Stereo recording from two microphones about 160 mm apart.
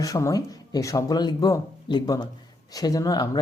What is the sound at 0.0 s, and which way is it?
Speech, 20° left (ahead or behind).